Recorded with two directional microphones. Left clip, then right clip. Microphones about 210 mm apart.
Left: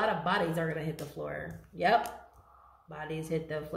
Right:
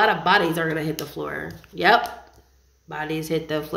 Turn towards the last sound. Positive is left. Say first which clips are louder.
# right 10 dB
turn(degrees=-45)  # may be behind; listen again after turning